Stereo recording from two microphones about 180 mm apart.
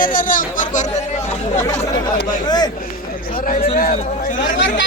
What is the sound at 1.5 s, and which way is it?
Speech, 15° left (ahead or behind).